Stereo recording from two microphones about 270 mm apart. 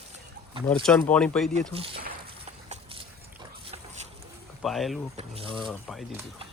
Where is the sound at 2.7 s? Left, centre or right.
Right.